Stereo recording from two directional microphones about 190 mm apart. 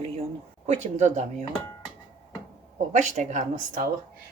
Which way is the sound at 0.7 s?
40° right (ahead or behind).